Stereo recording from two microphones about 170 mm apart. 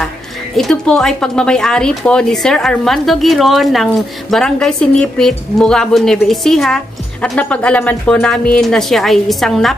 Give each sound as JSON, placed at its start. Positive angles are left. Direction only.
{"t": 0.6, "sound": "speech", "side_deg": 0}